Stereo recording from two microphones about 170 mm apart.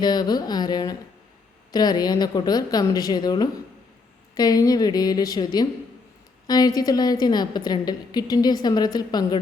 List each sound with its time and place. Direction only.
0.0 s a woman's voice: 25° left (ahead or behind)